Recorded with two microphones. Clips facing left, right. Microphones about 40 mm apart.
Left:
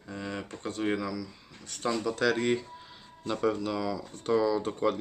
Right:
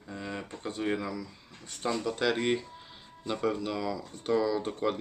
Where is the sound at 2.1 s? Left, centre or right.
Centre.